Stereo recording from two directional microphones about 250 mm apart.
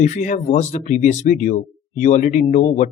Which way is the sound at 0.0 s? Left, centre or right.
Left.